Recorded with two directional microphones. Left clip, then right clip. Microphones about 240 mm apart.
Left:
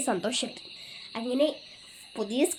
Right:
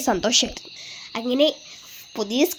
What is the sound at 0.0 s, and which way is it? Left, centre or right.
A child's voice, right.